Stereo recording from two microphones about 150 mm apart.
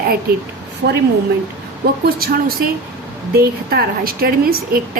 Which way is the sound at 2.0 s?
90° right.